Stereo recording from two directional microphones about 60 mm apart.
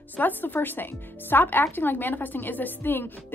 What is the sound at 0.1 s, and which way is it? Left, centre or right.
A woman's voice, left.